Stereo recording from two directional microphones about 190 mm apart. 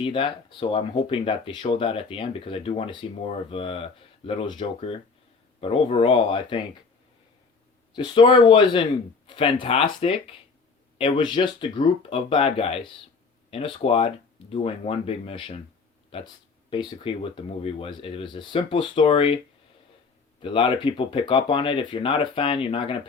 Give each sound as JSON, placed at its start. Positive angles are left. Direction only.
{"t": 0.0, "sound": "speech", "side_deg": 25}
{"t": 7.9, "sound": "speech", "side_deg": 25}
{"t": 20.4, "sound": "speech", "side_deg": 25}